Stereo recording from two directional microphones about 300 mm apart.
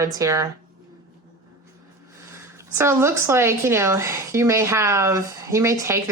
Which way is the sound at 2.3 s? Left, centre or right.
Centre.